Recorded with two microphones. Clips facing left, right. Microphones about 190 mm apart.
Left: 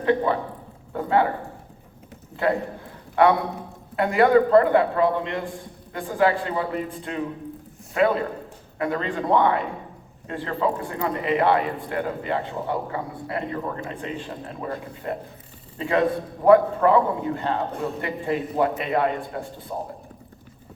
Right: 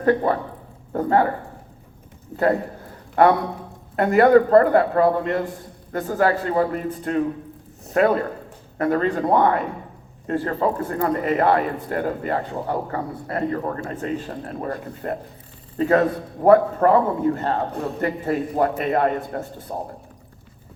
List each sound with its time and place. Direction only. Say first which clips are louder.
0.0 s a man's voice: right 2 dB; 45° right (ahead or behind)
2.3 s a man's voice: right 3 dB; 45° right (ahead or behind)